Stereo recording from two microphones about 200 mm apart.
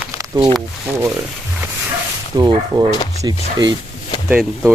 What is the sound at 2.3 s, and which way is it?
Speech, 20° right (ahead or behind).